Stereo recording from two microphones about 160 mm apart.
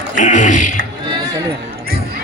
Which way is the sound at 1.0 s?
25° right (ahead or behind).